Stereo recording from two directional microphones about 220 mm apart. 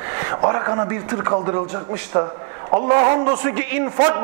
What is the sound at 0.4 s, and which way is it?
A man's voice, 20° right (ahead or behind).